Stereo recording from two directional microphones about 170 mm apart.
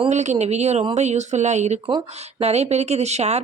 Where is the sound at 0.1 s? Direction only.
45° right (ahead or behind).